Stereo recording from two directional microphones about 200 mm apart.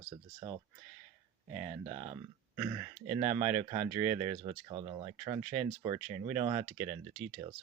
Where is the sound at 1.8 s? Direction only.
25° right (ahead or behind).